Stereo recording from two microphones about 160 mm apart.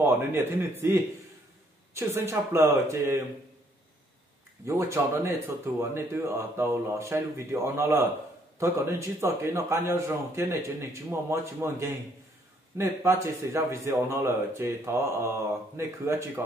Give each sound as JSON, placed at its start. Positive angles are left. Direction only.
{"t": 0.0, "sound": "speech", "side_deg": -15}
{"t": 4.6, "sound": "speech", "side_deg": -15}